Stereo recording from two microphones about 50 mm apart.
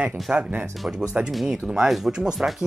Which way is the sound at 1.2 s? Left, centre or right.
Right.